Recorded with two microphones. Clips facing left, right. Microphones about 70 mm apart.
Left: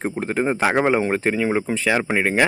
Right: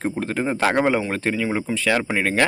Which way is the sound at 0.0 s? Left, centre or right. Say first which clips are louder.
Left 2 dB; centre.